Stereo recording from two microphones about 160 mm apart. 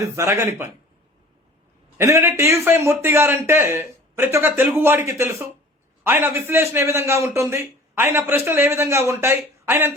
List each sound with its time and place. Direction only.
0.0 s a man's voice: 20° right (ahead or behind)
2.0 s a man's voice: 15° right (ahead or behind)